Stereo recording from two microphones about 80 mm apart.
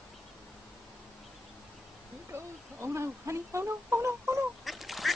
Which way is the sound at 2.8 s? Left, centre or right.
Right.